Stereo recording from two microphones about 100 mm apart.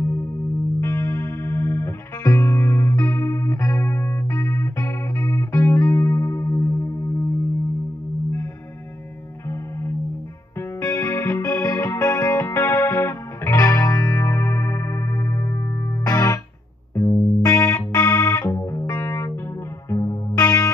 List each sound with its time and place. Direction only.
0.0 s music: 25° left (ahead or behind)
9.5 s music: 25° left (ahead or behind)